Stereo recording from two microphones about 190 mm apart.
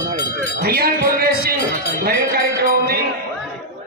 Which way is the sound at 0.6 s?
55° right (ahead or behind).